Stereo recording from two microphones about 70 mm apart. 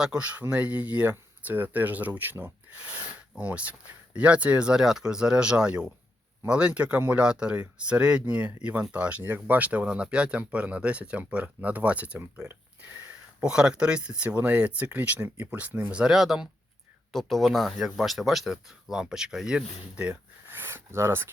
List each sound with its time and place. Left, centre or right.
0.0 s speech: centre
3.3 s speech: centre
20.5 s a sound: right